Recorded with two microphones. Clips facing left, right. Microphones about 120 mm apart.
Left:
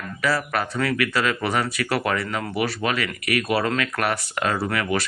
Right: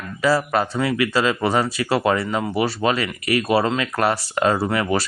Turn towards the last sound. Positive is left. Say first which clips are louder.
# right 3 dB
turn(degrees=-30)  # may be behind; listen again after turning